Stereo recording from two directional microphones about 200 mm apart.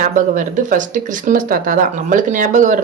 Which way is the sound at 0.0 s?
40° right (ahead or behind).